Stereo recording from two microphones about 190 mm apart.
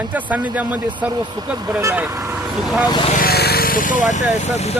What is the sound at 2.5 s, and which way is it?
Speech, centre (ahead or behind).